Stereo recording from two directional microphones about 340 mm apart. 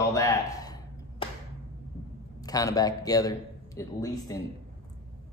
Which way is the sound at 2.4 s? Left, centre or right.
Centre.